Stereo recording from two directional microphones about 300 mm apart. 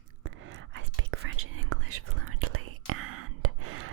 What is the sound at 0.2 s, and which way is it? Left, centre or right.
Whispering, right.